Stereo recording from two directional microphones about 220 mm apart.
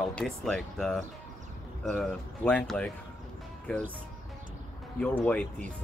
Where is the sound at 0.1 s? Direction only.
5° left (ahead or behind).